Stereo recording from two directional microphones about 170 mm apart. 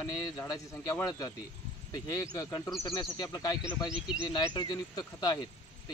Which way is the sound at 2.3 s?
20° left (ahead or behind).